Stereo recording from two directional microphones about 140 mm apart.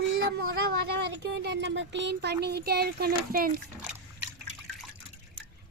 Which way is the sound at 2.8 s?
90° right.